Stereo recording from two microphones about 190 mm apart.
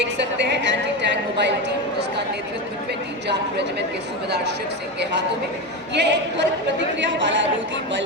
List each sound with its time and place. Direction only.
0.0 s a woman's voice: 65° right (ahead or behind)
3.2 s a woman's voice: 65° right (ahead or behind)
5.9 s speech: 65° right (ahead or behind)